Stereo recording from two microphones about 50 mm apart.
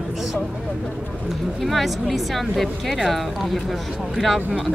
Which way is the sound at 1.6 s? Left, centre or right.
Centre.